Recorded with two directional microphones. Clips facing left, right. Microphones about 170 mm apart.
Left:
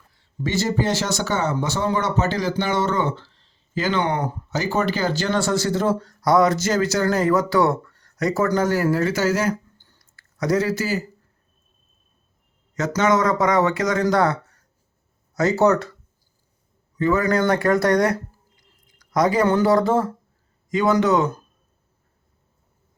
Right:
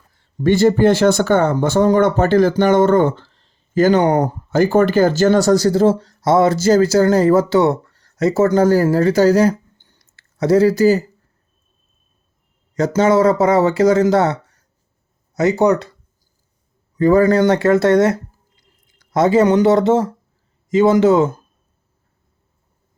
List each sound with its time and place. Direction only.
0.1 s speech: 50° right (ahead or behind)
9.7 s a sound: 20° right (ahead or behind); by 11.0 s 35° right (ahead or behind)
12.7 s speech: 30° right (ahead or behind)
15.4 s speech: 20° right (ahead or behind)
17.0 s speech: 35° right (ahead or behind)